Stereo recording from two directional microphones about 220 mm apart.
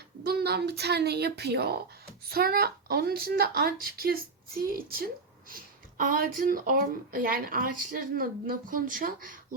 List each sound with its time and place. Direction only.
0.3 s a woman's voice: 45° right (ahead or behind)